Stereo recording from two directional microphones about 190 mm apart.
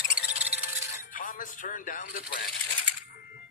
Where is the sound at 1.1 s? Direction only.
45° left (ahead or behind).